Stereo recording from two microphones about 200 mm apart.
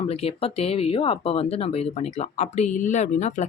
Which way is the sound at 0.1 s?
30° left (ahead or behind).